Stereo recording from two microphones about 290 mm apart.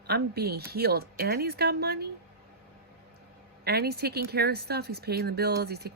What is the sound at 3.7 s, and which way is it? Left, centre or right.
Speech, right.